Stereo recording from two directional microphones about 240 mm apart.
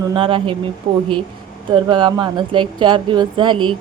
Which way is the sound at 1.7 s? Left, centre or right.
Centre.